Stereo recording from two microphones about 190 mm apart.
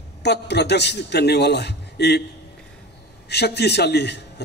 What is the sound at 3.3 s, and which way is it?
Speech, 60° left (ahead or behind).